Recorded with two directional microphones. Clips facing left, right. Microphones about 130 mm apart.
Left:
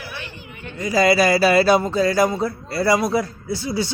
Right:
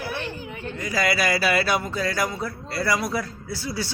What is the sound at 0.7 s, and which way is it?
Speech, 25° left (ahead or behind).